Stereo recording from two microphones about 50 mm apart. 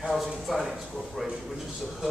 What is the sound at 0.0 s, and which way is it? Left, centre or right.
Speech, centre.